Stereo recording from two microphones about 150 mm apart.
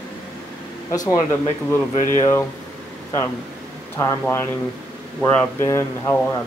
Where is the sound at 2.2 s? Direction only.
20° left (ahead or behind).